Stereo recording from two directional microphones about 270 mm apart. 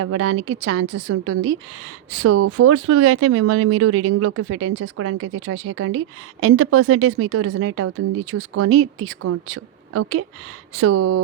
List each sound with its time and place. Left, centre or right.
0.0 s speech: right
10.9 s speech: right